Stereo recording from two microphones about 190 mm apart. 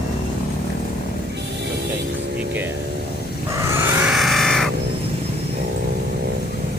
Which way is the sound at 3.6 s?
15° right (ahead or behind).